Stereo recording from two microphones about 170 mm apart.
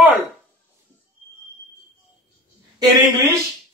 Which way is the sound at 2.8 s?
25° right (ahead or behind).